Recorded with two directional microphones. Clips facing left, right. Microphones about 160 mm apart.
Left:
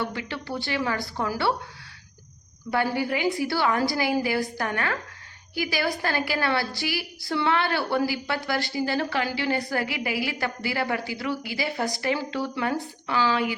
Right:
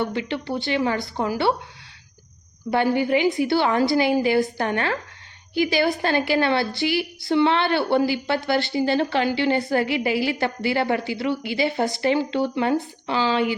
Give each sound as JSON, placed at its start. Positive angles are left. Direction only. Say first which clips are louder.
{"t": 0.0, "sound": "a woman's voice", "louder": "right 6 dB", "side_deg": -25}
{"t": 2.6, "sound": "a woman's voice", "louder": "right 5 dB", "side_deg": -25}